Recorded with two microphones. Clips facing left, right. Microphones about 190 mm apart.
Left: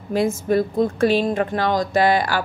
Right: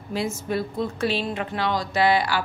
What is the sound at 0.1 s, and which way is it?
A woman's voice, 50° left (ahead or behind).